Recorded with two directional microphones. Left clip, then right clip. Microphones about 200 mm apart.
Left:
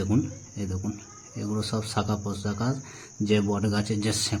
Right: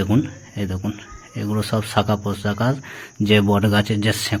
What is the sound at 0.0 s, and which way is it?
Speech, 10° right (ahead or behind).